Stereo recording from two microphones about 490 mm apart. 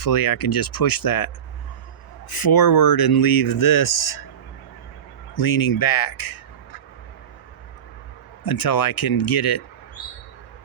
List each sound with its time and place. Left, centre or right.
0.0 s speech: left
2.3 s speech: left
5.3 s speech: left
8.4 s speech: left